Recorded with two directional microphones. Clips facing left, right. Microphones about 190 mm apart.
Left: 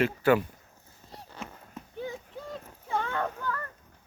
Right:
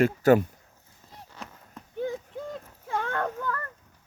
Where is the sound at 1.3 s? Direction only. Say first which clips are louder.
Left 2 dB; 30° left (ahead or behind).